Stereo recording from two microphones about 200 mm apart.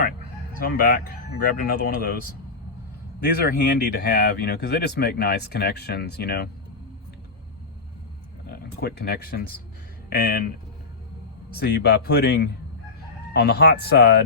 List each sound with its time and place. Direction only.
0.6 s speech: 45° left (ahead or behind)
3.2 s speech: 50° left (ahead or behind)
8.4 s speech: 50° left (ahead or behind)
11.5 s speech: 55° left (ahead or behind)